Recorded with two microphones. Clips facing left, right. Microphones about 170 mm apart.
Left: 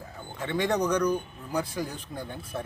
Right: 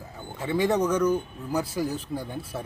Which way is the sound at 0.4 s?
5° right (ahead or behind).